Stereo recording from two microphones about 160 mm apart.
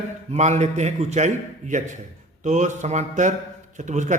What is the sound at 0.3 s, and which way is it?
A man's voice, 45° right (ahead or behind).